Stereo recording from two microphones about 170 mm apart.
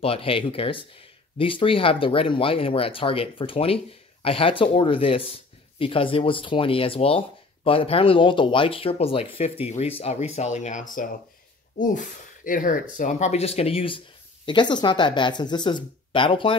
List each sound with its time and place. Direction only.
0.0 s speech: 35° left (ahead or behind)